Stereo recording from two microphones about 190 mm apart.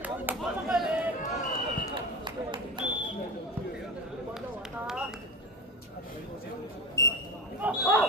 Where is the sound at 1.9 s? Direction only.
25° right (ahead or behind).